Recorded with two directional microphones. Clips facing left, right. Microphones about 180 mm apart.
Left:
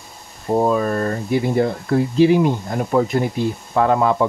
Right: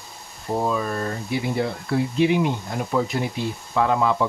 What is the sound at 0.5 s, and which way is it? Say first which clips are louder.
Speech: left 6 dB; 45° left (ahead or behind).